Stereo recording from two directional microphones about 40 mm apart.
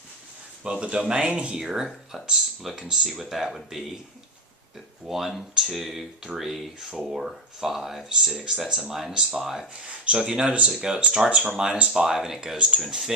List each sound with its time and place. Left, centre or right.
0.6 s speech: right
1.5 s speech: centre
5.0 s speech: centre
9.8 s speech: right
10.9 s speech: right
12.8 s speech: centre